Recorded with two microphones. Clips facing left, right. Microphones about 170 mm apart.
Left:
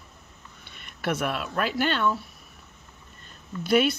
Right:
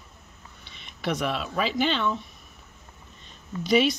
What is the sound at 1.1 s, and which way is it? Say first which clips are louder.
Speech: even; 5° left (ahead or behind).